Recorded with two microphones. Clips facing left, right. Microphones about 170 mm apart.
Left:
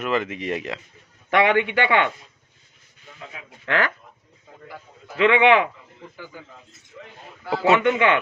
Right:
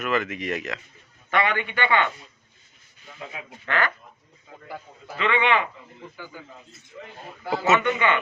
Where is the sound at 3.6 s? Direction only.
90° left.